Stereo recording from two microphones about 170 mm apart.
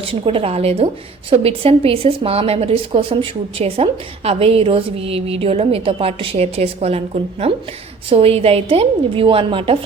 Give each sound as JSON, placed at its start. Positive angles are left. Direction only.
{"t": 0.0, "sound": "a woman's voice", "side_deg": -30}